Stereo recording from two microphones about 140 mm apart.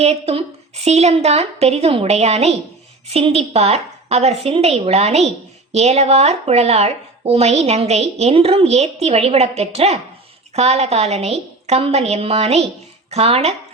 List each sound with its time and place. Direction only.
0.0 s speech: 45° right (ahead or behind)